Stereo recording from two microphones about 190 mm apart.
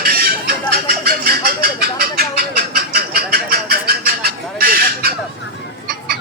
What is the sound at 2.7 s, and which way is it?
Vehicle, 55° right (ahead or behind).